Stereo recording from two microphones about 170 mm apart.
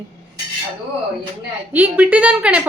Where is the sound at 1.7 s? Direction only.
10° right (ahead or behind).